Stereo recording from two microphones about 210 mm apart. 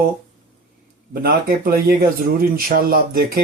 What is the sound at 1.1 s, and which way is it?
Speech, 45° right (ahead or behind).